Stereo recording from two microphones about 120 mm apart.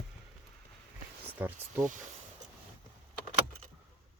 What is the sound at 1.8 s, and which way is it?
Speech, 90° right.